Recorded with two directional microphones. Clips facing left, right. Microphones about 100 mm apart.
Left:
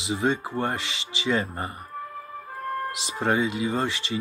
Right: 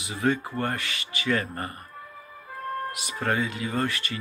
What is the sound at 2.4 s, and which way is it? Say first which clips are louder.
Music: left 1 dB; 40° left (ahead or behind).